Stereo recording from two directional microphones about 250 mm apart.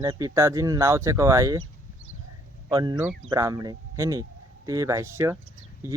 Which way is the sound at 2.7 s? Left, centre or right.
Centre.